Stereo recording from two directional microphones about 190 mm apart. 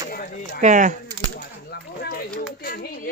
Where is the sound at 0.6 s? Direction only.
40° right (ahead or behind).